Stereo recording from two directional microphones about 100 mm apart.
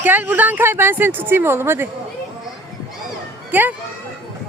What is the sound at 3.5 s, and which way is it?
Speech, 20° right (ahead or behind).